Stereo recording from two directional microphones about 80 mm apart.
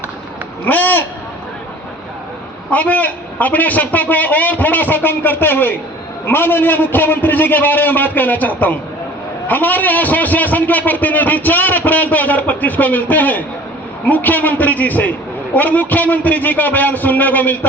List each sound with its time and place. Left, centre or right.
0.6 s a man's voice: left
2.6 s a man's voice: centre